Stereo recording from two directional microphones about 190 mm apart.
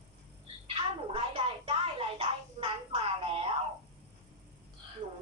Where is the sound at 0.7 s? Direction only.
30° right (ahead or behind).